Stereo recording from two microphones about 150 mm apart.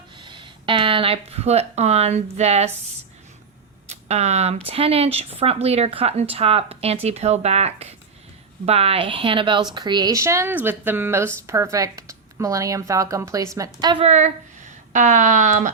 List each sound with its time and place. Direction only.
0.2 s speech: 30° right (ahead or behind)
3.8 s speech: 45° right (ahead or behind); by 13.7 s 20° right (ahead or behind)
14.0 s speech: 50° right (ahead or behind)